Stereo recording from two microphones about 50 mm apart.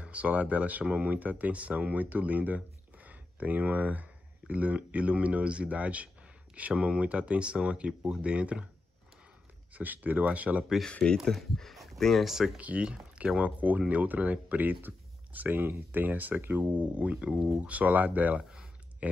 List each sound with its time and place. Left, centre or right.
0.0 s speech: right
9.8 s speech: right
10.9 s speech: centre
11.2 s speech: centre
12.5 s speech: right
18.4 s a sound: centre